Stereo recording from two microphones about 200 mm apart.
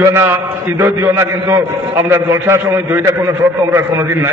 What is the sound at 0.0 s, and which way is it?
A man's voice, 10° right (ahead or behind).